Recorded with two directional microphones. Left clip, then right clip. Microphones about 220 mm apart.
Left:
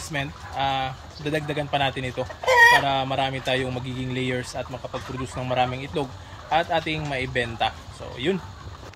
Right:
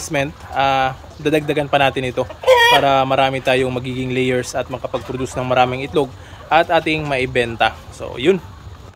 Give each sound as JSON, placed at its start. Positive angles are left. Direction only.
{"t": 0.1, "sound": "speech", "side_deg": -15}
{"t": 2.4, "sound": "speech", "side_deg": -35}
{"t": 2.8, "sound": "speech", "side_deg": -15}